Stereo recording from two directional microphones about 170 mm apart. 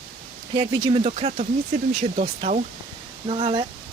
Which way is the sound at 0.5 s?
30° right (ahead or behind).